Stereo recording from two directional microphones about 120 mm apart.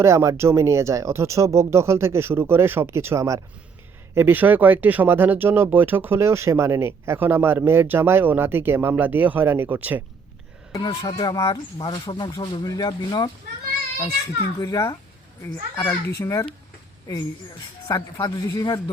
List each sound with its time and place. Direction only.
0.0 s speech: 25° right (ahead or behind)
10.8 s speech: 35° left (ahead or behind)
14.6 s a child's voice: 35° left (ahead or behind)
17.8 s speech: 30° left (ahead or behind)